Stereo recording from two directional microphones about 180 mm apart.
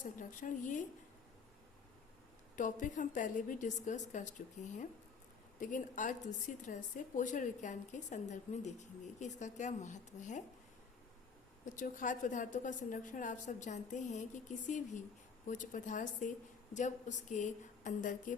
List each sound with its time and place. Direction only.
0.0 s a woman's voice: 45° left (ahead or behind)
2.6 s a woman's voice: 45° left (ahead or behind)
11.6 s a woman's voice: 45° left (ahead or behind)